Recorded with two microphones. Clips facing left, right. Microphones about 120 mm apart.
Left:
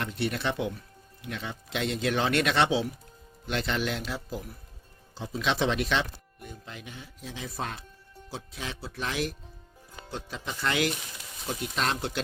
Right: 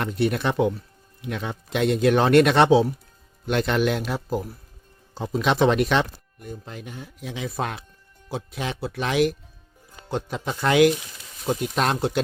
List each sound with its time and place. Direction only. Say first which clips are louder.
0.0 s speech: right 7 dB; 50° right (ahead or behind); by 9.3 s 75° right (ahead or behind)
10.1 s speech: right 9 dB; 60° right (ahead or behind)